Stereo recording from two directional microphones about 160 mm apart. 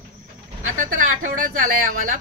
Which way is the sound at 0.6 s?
55° right (ahead or behind).